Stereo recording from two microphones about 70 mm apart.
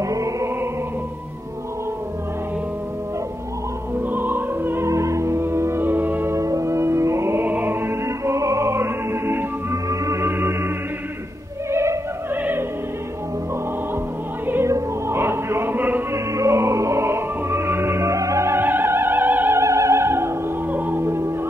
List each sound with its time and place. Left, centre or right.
0.0 s music: right
3.9 s opera: right
4.8 s music: right
6.3 s music: right
7.4 s music: right
9.8 s music: right
11.7 s opera: right
12.4 s opera: right
14.4 s opera: right
14.7 s a sound: right
16.1 s music: right
19.6 s music: right